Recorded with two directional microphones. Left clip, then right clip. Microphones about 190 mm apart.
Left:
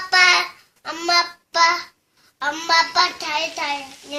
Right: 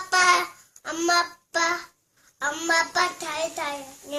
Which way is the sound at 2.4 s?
15° right (ahead or behind).